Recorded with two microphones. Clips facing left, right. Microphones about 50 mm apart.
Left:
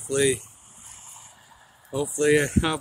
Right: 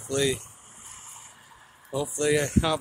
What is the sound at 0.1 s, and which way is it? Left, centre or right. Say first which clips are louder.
Speech: left 3 dB; left.